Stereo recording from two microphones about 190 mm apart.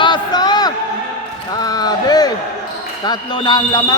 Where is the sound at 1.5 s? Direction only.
20° left (ahead or behind).